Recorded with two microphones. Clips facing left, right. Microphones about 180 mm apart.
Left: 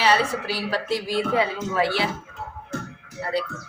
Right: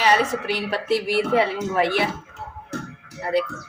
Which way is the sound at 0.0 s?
20° right (ahead or behind).